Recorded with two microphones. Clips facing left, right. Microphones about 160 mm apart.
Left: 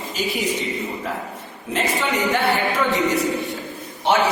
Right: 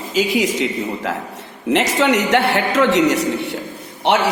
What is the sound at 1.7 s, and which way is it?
A woman's voice, 80° right.